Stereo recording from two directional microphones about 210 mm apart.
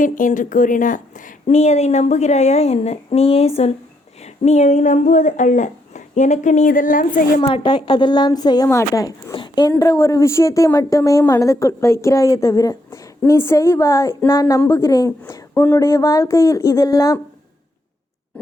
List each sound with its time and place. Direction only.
0.0 s a woman's voice: 40° left (ahead or behind)
7.5 s speech: 25° left (ahead or behind)